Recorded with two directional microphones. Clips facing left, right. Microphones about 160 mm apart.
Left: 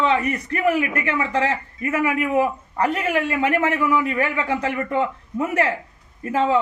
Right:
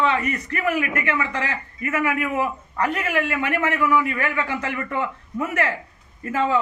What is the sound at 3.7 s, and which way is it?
A man's voice, 20° left (ahead or behind).